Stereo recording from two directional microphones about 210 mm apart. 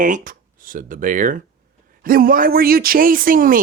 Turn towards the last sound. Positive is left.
turn(degrees=-40)  # may be behind; listen again after turning